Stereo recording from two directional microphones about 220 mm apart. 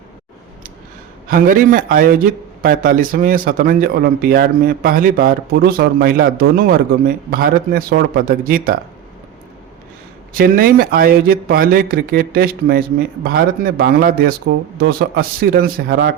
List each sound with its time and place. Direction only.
1.3 s a man's voice: 40° right (ahead or behind)
10.3 s speech: 40° right (ahead or behind)